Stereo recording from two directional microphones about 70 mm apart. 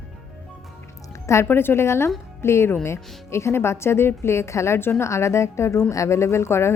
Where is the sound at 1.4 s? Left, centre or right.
Left.